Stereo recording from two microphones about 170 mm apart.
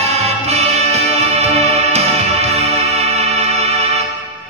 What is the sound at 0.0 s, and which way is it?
Music, 40° right (ahead or behind).